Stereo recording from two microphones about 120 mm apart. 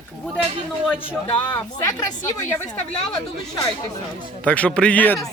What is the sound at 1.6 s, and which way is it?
Speech, 30° left (ahead or behind).